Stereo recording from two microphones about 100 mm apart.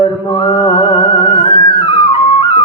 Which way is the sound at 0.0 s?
60° left (ahead or behind).